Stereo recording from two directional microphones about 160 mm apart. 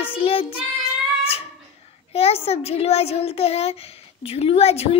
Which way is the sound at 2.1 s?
40° left (ahead or behind).